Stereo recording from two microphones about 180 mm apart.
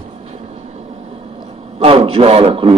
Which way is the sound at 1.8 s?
35° right (ahead or behind).